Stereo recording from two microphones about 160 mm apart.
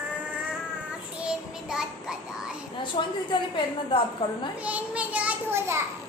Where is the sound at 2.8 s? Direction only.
30° left (ahead or behind).